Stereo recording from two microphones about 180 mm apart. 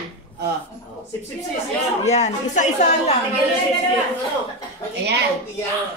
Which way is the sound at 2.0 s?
40° left (ahead or behind).